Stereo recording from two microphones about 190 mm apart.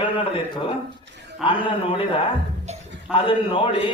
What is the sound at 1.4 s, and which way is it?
Speech, 5° right (ahead or behind).